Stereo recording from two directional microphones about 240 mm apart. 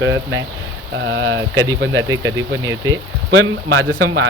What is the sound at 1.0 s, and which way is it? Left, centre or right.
Speech, right.